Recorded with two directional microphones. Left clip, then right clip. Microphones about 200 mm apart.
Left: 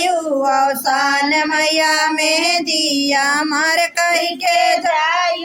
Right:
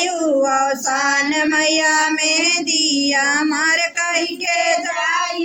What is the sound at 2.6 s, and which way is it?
Child singing, 90° left.